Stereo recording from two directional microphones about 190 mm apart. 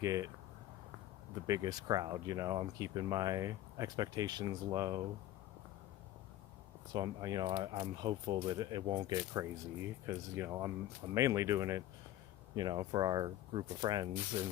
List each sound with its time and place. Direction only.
0.0 s speech: 15° right (ahead or behind)
1.5 s speech: 20° right (ahead or behind)
6.9 s speech: 20° right (ahead or behind)